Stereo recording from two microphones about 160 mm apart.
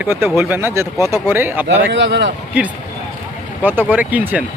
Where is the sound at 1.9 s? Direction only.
90° right.